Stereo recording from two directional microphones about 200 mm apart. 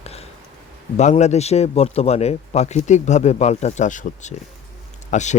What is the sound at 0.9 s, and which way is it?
Speech, 35° left (ahead or behind).